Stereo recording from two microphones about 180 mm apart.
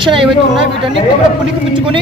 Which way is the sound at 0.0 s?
30° right (ahead or behind).